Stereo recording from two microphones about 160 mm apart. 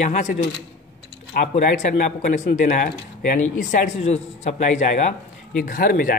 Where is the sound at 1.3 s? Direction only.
55° left (ahead or behind).